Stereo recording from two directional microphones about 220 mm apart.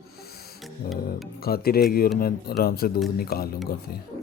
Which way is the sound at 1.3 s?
45° left (ahead or behind).